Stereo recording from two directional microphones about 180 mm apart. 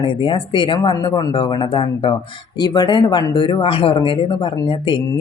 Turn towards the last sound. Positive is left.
turn(degrees=25)  # may be behind; listen again after turning